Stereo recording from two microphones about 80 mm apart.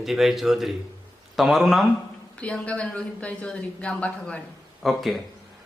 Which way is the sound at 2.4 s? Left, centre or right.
Centre.